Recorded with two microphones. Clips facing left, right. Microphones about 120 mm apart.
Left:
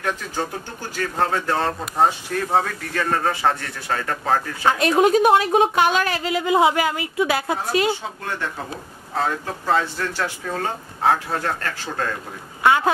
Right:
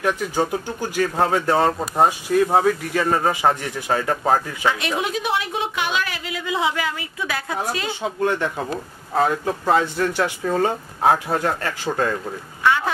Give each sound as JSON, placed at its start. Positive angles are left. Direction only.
{"t": 0.0, "sound": "speech", "side_deg": -10}
{"t": 4.6, "sound": "a woman's voice", "side_deg": 45}
{"t": 7.2, "sound": "a woman's voice", "side_deg": 25}
{"t": 9.1, "sound": "speech", "side_deg": -15}